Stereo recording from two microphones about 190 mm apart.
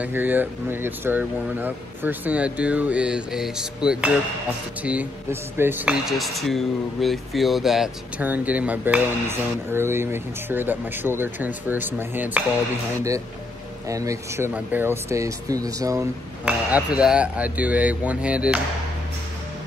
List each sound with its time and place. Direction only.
0.0 s speech: 10° right (ahead or behind)
13.8 s speech: 15° right (ahead or behind)
16.4 s speech: 5° right (ahead or behind)